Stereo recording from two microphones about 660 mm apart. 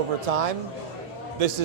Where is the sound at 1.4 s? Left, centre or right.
Right.